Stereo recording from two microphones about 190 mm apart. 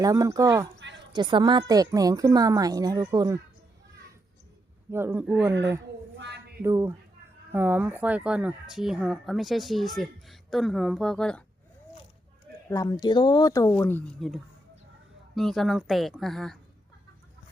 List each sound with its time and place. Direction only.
0.0 s a woman's voice: 20° right (ahead or behind)
4.9 s speech: 10° right (ahead or behind)
6.1 s a sound: 60° right (ahead or behind)
6.6 s speech: 15° right (ahead or behind); by 11.4 s 5° left (ahead or behind)
12.7 s speech: 20° left (ahead or behind)
15.4 s speech: centre (ahead or behind)